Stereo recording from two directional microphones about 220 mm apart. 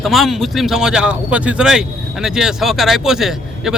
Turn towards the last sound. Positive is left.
turn(degrees=0)  # may be behind; listen again after turning